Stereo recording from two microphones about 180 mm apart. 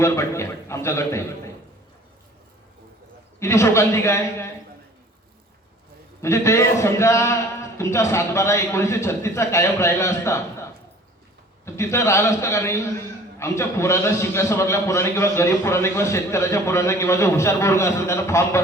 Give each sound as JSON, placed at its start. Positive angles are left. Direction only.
{"t": 0.0, "sound": "a man's voice", "side_deg": 15}
{"t": 3.4, "sound": "a man's voice", "side_deg": 15}
{"t": 6.2, "sound": "a man's voice", "side_deg": 15}